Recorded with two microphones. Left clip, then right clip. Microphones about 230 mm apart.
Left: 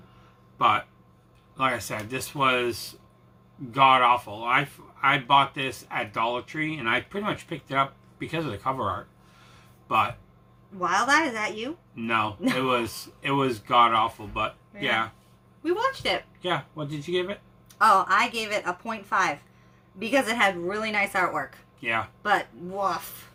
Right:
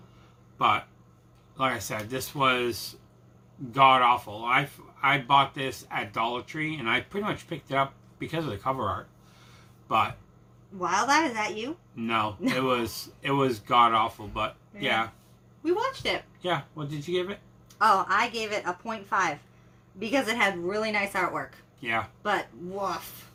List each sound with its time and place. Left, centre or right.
0.6 s speech: centre
10.8 s a woman's voice: centre
11.9 s speech: centre
15.6 s a woman's voice: centre
16.4 s speech: centre
17.7 s a woman's voice: centre
21.8 s speech: centre
22.2 s a woman's voice: centre